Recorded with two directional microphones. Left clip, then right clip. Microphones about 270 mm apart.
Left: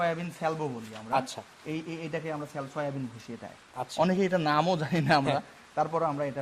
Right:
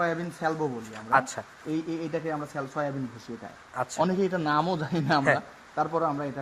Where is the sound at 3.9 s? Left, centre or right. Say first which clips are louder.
Left 1 dB; left.